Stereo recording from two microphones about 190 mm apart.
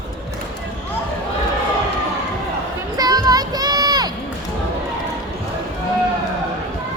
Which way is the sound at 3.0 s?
20° right (ahead or behind).